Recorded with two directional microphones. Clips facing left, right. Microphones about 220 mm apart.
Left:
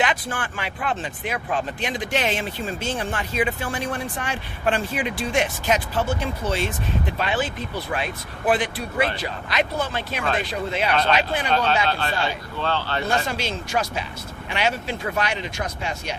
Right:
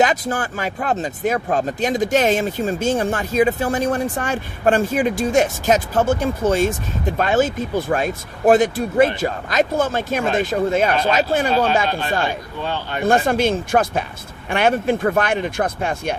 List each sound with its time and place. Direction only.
0.0 s speech: 40° right (ahead or behind)
11.9 s speech: 15° right (ahead or behind)
12.1 s speech: 50° right (ahead or behind)
12.5 s speech: 15° right (ahead or behind)
13.1 s speech: 50° right (ahead or behind)